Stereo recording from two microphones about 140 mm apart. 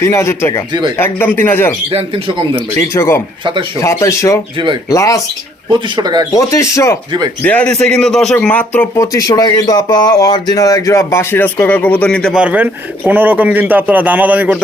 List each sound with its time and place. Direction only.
0.0 s speech: 20° left (ahead or behind)
1.9 s a man's voice: 45° right (ahead or behind)
2.7 s speech: 20° left (ahead or behind)
3.4 s speech: 35° right (ahead or behind)
3.8 s speech: 20° left (ahead or behind)
4.5 s speech: 35° right (ahead or behind)
4.9 s speech: 25° left (ahead or behind)
6.0 s speech: 30° right (ahead or behind)
6.3 s speech: 20° left (ahead or behind)
7.4 s speech: 10° left (ahead or behind)
9.0 s speech: 25° left (ahead or behind); by 12.4 s 5° left (ahead or behind)
12.4 s a man's voice: 10° right (ahead or behind)